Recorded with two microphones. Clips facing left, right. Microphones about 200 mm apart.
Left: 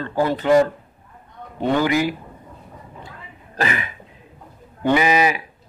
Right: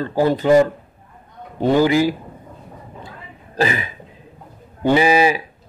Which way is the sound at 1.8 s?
30° right (ahead or behind).